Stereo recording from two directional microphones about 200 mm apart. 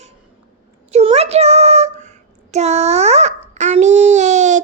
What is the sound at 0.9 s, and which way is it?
Child singing, 30° right (ahead or behind).